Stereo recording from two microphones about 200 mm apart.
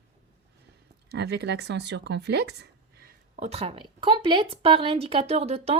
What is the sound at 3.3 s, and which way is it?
A woman's voice, 30° right (ahead or behind).